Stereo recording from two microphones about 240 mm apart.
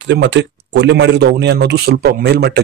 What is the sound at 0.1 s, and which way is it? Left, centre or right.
A man's voice, right.